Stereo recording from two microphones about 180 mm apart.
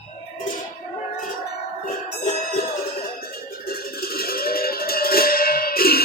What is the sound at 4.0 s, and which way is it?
Music, 55° left (ahead or behind).